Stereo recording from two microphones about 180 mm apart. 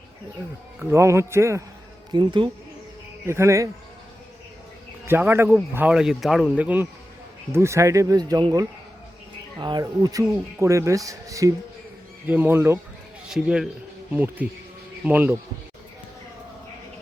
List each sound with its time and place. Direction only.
0.8 s speech: 15° right (ahead or behind)
2.1 s speech: 25° right (ahead or behind)
3.2 s speech: 15° right (ahead or behind)
5.0 s a man's voice: 10° right (ahead or behind)